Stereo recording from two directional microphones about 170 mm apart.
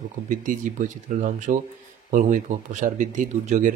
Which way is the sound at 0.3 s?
50° right (ahead or behind).